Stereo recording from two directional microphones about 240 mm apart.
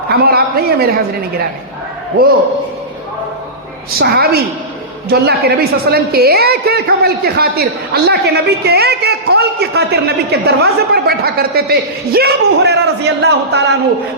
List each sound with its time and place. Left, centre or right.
0.1 s a man's voice: right
4.0 s a woman's voice: right